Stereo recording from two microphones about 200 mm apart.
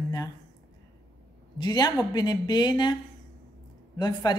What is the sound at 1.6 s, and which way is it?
A woman's voice, 20° left (ahead or behind).